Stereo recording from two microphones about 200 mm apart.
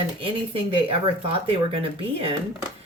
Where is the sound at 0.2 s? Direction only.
25° right (ahead or behind).